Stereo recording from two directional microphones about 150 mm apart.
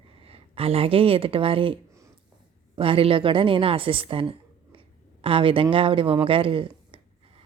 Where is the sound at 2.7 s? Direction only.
35° right (ahead or behind).